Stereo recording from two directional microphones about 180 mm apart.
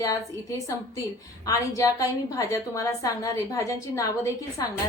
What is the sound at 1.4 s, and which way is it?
A woman's voice, 15° left (ahead or behind).